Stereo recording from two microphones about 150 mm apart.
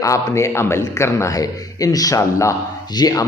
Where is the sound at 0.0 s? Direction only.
20° left (ahead or behind).